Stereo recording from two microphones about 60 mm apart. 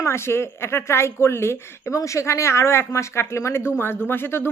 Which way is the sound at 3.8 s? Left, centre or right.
Left.